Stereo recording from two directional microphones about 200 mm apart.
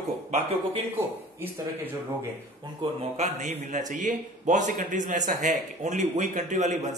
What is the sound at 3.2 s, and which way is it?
A man's voice, 40° right (ahead or behind).